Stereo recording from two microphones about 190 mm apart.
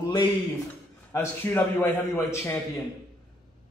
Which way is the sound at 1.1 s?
10° left (ahead or behind).